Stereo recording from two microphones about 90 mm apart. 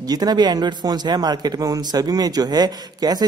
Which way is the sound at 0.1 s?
50° right (ahead or behind).